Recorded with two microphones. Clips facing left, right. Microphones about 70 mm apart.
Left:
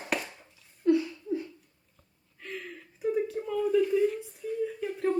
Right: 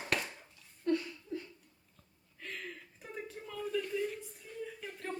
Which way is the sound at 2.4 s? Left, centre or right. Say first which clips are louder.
Left 4 dB; centre.